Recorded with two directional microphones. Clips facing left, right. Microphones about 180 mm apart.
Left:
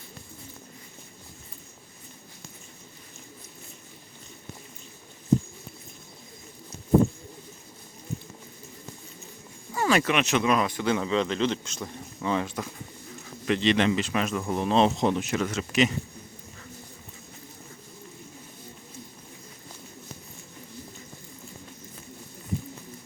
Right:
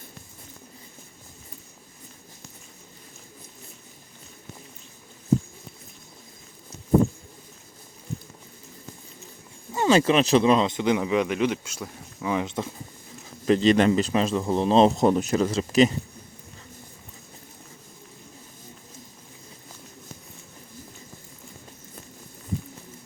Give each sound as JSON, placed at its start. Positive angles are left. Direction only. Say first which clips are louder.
{"t": 9.7, "sound": "speech", "louder": "right 5 dB", "side_deg": -25}
{"t": 13.4, "sound": "speech", "louder": "right 5 dB", "side_deg": -40}